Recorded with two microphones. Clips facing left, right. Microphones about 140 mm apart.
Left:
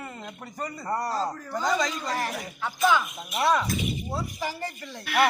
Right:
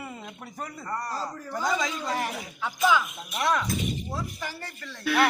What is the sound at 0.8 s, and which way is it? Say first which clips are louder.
Speech: left 5 dB; 25° left (ahead or behind).